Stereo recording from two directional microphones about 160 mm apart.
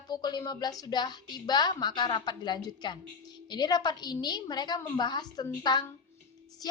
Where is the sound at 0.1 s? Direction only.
25° left (ahead or behind).